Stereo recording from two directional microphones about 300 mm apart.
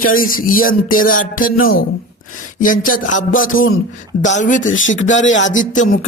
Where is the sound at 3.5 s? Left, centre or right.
Left.